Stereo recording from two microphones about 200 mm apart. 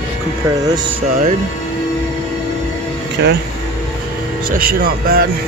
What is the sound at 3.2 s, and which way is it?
Speech, 60° right (ahead or behind).